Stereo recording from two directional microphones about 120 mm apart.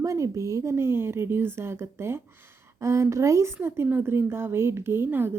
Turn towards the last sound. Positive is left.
turn(degrees=-20)  # may be behind; listen again after turning